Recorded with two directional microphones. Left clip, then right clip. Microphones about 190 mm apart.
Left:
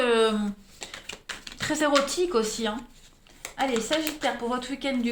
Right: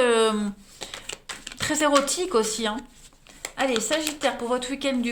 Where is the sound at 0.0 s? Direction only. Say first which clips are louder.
Right 2 dB; 35° right (ahead or behind).